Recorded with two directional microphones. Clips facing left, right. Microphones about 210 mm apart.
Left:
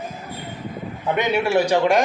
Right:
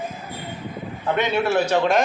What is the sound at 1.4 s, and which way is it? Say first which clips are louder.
Speech: left 3 dB; 15° left (ahead or behind).